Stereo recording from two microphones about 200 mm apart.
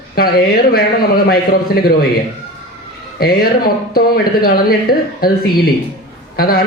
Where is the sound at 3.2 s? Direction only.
50° left (ahead or behind).